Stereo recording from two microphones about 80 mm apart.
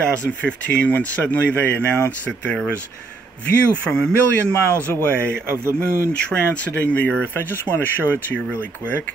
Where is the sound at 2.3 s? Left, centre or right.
Centre.